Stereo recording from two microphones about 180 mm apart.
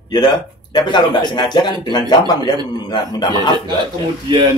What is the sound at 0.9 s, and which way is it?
Speech, 25° left (ahead or behind).